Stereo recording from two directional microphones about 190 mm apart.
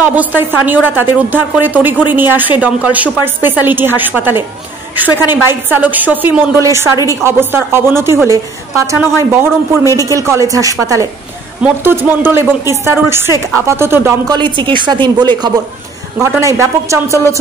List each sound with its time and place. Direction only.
0.0 s a woman's voice: 10° right (ahead or behind)